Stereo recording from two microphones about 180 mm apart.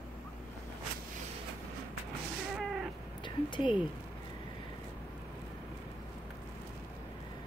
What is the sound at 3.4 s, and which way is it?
Speech, 25° left (ahead or behind).